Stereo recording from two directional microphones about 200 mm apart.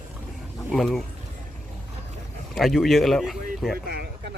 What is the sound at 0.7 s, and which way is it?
Speech, centre (ahead or behind).